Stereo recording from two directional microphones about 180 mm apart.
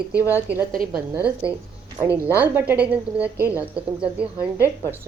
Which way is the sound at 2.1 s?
15° left (ahead or behind).